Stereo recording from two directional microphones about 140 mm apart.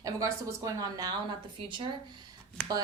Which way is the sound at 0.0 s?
25° right (ahead or behind).